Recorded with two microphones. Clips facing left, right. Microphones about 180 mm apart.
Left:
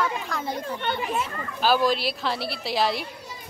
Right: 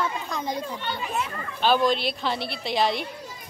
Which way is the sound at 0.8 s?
60° left (ahead or behind).